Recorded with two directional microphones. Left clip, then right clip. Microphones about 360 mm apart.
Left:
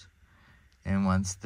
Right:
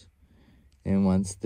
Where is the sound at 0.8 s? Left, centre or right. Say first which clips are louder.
Right 3 dB; centre.